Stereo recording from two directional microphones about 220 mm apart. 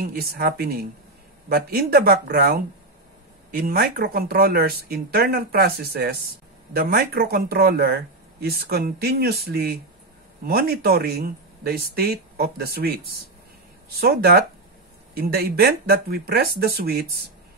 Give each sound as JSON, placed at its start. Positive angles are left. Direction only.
{"t": 0.0, "sound": "speech", "side_deg": -40}